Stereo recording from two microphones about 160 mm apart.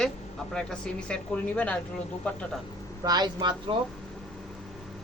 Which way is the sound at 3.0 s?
25° right (ahead or behind).